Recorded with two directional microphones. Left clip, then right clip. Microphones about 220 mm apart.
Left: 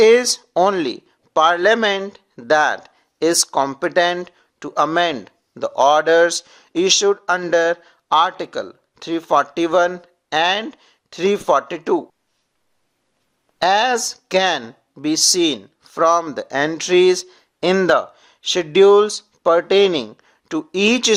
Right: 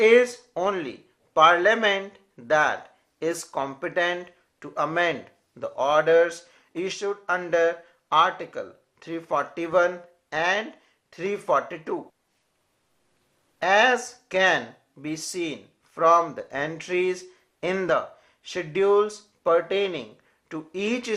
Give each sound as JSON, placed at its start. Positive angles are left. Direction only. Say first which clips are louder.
{"t": 0.0, "sound": "speech", "louder": "left 5 dB", "side_deg": 45}
{"t": 13.6, "sound": "speech", "louder": "left 4 dB", "side_deg": 45}